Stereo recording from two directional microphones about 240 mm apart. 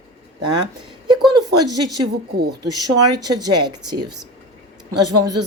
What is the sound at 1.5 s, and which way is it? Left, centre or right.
Speech, right.